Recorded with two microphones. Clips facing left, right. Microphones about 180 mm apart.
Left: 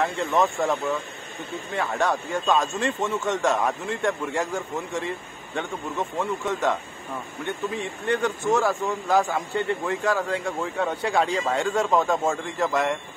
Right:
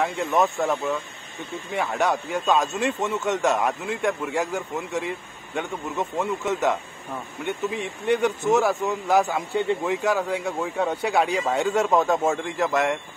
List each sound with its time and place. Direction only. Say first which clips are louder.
0.0 s speech: even; 10° right (ahead or behind)
4.7 s speech: right 1 dB; 15° right (ahead or behind)